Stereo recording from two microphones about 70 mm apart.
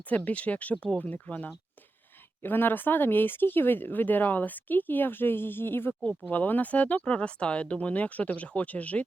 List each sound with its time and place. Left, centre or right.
0.3 s speech: left
6.1 s speech: left